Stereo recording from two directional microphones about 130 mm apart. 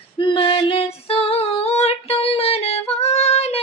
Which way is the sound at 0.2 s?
40° left (ahead or behind).